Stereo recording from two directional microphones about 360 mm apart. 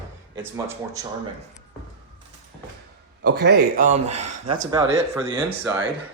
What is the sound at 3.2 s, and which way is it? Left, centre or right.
Speech, right.